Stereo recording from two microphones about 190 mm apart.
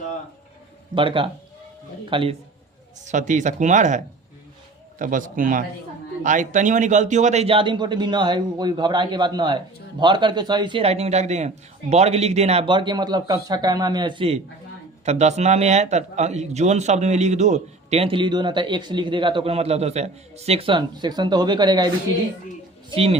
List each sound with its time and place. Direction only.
0.9 s a man's voice: 25° right (ahead or behind)
3.0 s a man's voice: 40° right (ahead or behind); by 21.8 s 25° right (ahead or behind)